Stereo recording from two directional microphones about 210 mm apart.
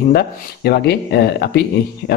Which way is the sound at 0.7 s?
50° left (ahead or behind).